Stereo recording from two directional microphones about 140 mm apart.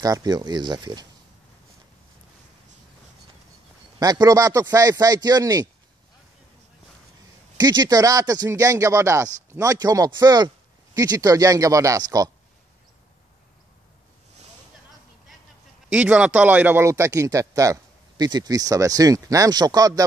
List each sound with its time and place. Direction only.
0.0 s speech: 30° right (ahead or behind)
4.0 s speech: 30° right (ahead or behind)
7.5 s speech: 30° right (ahead or behind)
15.9 s speech: 10° right (ahead or behind); by 20.1 s 25° right (ahead or behind)